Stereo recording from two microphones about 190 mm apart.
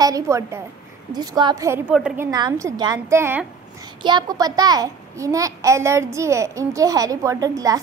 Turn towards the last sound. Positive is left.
turn(degrees=-20)  # may be behind; listen again after turning